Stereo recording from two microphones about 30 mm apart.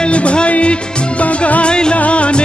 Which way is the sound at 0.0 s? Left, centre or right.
Left.